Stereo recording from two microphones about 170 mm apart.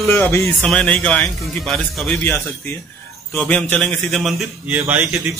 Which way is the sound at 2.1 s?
15° left (ahead or behind).